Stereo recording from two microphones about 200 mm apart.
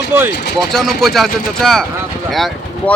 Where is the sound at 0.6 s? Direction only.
Centre (ahead or behind).